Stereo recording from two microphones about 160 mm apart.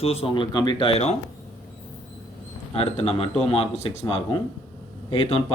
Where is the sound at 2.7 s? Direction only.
40° left (ahead or behind).